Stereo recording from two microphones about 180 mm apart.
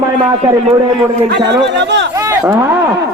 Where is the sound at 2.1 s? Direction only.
15° right (ahead or behind).